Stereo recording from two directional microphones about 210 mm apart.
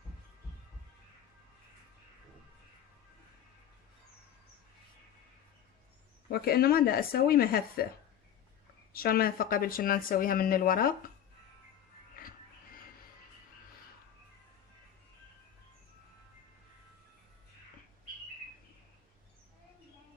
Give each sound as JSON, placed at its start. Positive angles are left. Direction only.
{"t": 6.2, "sound": "speech", "side_deg": 45}
{"t": 8.9, "sound": "speech", "side_deg": 45}